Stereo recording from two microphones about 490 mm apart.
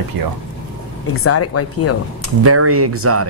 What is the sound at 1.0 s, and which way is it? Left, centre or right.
Speech, left.